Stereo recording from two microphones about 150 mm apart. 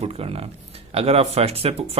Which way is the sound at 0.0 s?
40° right (ahead or behind).